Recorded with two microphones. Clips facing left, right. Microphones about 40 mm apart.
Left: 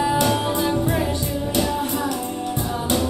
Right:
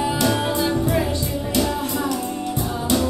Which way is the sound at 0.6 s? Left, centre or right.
Left.